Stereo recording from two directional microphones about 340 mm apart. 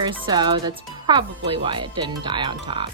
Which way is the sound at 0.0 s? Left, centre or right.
Centre.